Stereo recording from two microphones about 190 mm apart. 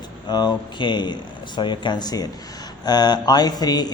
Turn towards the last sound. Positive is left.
turn(degrees=20)  # may be behind; listen again after turning